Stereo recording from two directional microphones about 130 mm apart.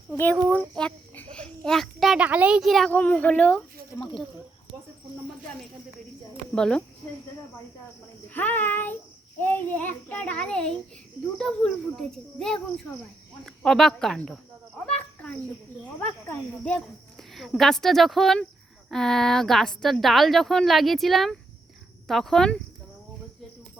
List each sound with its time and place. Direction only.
0.5 s a sound: 10° left (ahead or behind)
2.2 s a woman's voice: 10° right (ahead or behind)
2.9 s a child's voice: 10° left (ahead or behind)
6.5 s a child's voice: 5° left (ahead or behind)
8.3 s a child's voice: 15° left (ahead or behind)
16.0 s a woman's voice: 10° left (ahead or behind)